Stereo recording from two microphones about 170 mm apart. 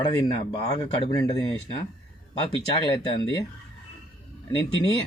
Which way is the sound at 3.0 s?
30° left (ahead or behind).